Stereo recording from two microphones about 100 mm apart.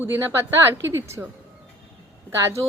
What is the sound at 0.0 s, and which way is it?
A woman's voice, 20° right (ahead or behind).